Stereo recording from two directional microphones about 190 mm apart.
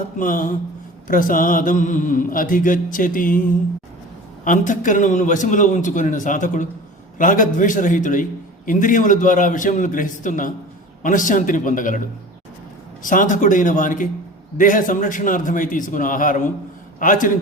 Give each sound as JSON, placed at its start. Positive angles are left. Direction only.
{"t": 0.2, "sound": "a man's voice", "side_deg": 45}
{"t": 4.4, "sound": "a man's voice", "side_deg": 45}